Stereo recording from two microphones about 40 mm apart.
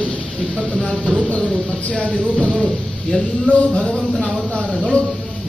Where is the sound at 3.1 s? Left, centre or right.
Centre.